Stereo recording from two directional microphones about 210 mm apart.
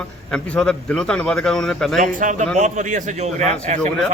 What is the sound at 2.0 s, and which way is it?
A man's voice, 40° right (ahead or behind).